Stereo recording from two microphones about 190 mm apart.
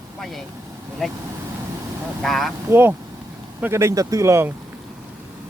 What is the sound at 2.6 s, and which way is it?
Speech, 10° right (ahead or behind).